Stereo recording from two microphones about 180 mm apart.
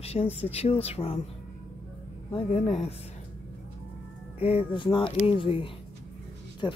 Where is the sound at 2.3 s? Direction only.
35° left (ahead or behind).